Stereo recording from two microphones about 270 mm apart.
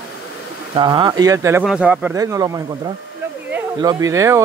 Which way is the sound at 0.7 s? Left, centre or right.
Centre.